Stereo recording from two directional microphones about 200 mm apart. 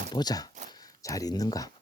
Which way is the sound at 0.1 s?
20° left (ahead or behind).